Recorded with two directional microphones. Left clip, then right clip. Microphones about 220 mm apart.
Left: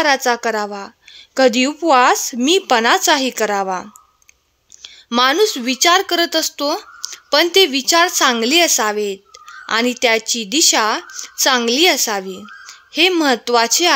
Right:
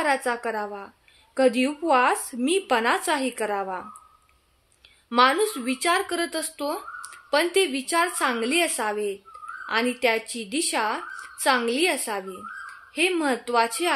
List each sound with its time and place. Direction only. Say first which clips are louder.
0.0 s speech: left 9 dB; 45° left (ahead or behind)
4.8 s speech: left 4 dB; 45° left (ahead or behind)